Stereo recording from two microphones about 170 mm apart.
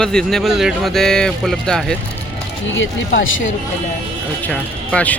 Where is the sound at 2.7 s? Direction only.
90° left.